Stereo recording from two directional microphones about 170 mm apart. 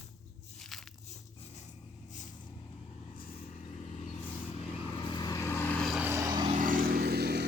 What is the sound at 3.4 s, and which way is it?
Vehicle, 40° left (ahead or behind).